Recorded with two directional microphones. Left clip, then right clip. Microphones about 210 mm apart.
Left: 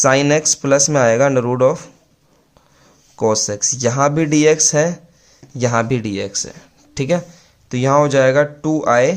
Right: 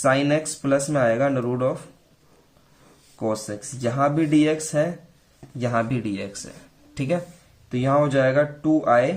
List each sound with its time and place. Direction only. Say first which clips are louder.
0.0 s speech: left 7 dB; 50° left (ahead or behind)
3.2 s speech: left 10 dB; 50° left (ahead or behind)